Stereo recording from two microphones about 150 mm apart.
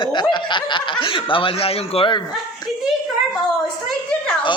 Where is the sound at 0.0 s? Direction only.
30° left (ahead or behind).